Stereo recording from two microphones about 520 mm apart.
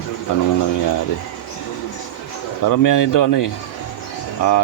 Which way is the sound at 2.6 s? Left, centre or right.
Left.